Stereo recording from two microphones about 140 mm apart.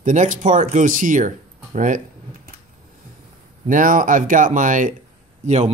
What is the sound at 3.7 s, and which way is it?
Speech, 70° right (ahead or behind).